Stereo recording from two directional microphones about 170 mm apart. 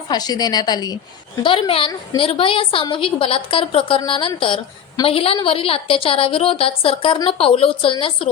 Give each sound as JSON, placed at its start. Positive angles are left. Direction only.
{"t": 0.1, "sound": "a woman's voice", "side_deg": 25}